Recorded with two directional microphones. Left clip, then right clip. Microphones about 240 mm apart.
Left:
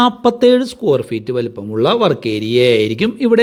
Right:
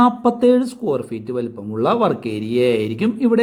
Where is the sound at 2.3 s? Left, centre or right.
Centre.